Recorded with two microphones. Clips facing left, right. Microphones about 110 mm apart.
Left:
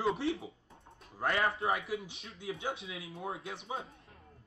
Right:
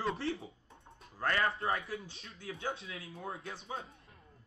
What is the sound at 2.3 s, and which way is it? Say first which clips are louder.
Speech: left 2 dB; 25° left (ahead or behind).